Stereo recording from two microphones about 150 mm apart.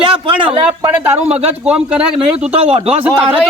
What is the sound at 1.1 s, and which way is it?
Speech, 45° right (ahead or behind).